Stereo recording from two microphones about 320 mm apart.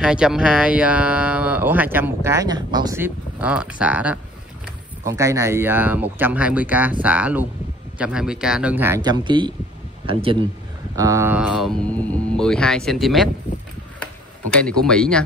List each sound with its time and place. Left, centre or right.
0.0 s speech: centre
14.5 s speech: centre